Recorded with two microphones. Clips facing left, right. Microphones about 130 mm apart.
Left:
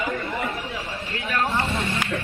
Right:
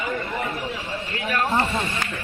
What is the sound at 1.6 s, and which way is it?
Speech, centre (ahead or behind).